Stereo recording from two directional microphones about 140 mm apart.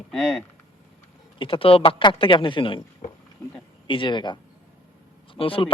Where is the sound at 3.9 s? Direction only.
35° left (ahead or behind).